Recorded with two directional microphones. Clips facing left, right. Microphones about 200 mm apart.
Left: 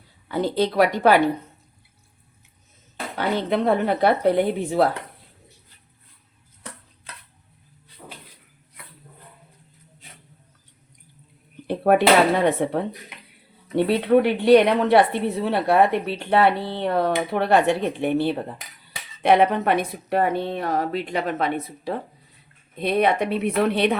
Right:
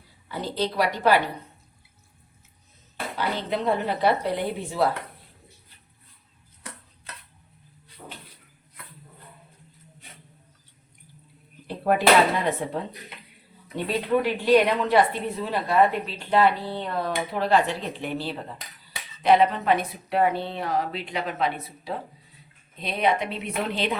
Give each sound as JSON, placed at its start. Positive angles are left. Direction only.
{"t": 0.3, "sound": "a woman's voice", "side_deg": 55}
{"t": 3.2, "sound": "speech", "side_deg": 55}
{"t": 11.7, "sound": "a woman's voice", "side_deg": 65}